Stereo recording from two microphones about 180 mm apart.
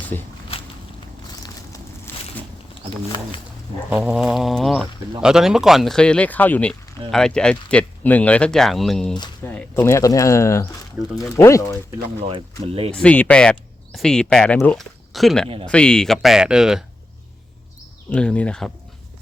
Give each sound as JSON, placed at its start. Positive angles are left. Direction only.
{"t": 2.1, "sound": "a sound", "side_deg": 10}
{"t": 3.8, "sound": "speech", "side_deg": -5}
{"t": 11.0, "sound": "speech", "side_deg": -15}
{"t": 11.3, "sound": "speech", "side_deg": 15}
{"t": 12.6, "sound": "speech", "side_deg": -35}
{"t": 12.9, "sound": "speech", "side_deg": 5}
{"t": 18.1, "sound": "speech", "side_deg": 5}